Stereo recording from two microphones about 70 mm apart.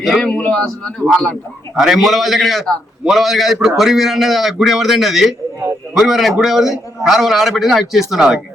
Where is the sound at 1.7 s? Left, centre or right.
Centre.